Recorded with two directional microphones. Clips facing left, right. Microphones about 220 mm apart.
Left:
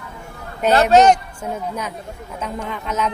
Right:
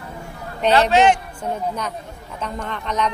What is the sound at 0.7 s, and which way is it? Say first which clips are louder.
Speech: left 3 dB; 40° left (ahead or behind).